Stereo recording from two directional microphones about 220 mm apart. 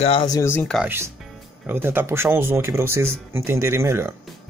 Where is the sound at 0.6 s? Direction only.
Centre (ahead or behind).